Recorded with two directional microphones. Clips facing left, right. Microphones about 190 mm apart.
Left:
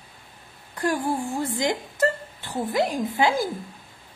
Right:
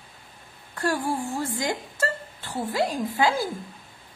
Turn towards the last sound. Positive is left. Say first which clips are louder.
# left 1 dB
turn(degrees=20)  # may be behind; listen again after turning